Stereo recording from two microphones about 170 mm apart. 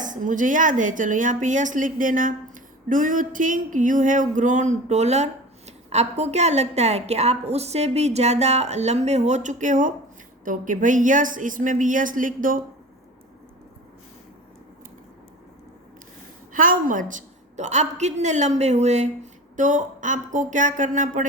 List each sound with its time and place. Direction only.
0.0 s a woman's voice: 50° right (ahead or behind)
2.9 s a sound: 50° right (ahead or behind)
10.4 s a woman's voice: 50° right (ahead or behind)
16.5 s a woman's voice: 55° right (ahead or behind)